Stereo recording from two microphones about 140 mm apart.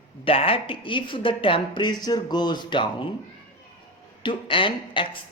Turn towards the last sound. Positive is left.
turn(degrees=40)  # may be behind; listen again after turning